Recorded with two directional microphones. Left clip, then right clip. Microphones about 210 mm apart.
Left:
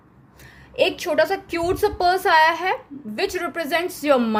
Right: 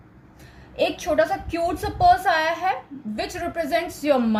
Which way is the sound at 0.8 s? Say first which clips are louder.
Left 2 dB; 50° left (ahead or behind).